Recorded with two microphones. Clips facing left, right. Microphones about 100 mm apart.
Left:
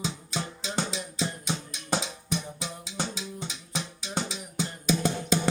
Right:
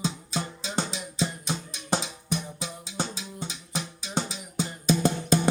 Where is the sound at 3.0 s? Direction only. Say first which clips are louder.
Right 1 dB; 5° right (ahead or behind).